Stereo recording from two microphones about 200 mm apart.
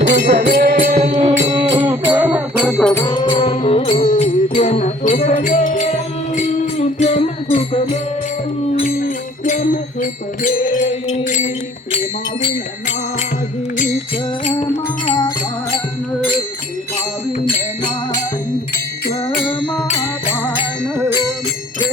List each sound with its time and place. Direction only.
0.2 s music: 55° right (ahead or behind)
0.9 s music: 30° right (ahead or behind)
1.8 s music: 15° right (ahead or behind)
2.2 s music: 5° right (ahead or behind)
2.9 s music: 15° left (ahead or behind); by 12.5 s 30° left (ahead or behind)
14.4 s music: 30° left (ahead or behind)
19.9 s music: 30° left (ahead or behind)